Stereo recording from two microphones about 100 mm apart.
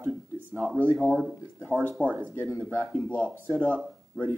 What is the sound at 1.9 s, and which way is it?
Speech, 15° right (ahead or behind).